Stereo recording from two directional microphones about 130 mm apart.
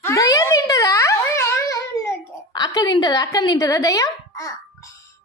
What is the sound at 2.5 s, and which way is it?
Speech, 30° left (ahead or behind).